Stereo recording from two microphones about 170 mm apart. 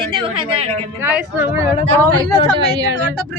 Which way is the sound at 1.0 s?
10° right (ahead or behind).